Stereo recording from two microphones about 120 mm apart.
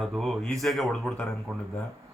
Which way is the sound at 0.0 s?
Centre (ahead or behind).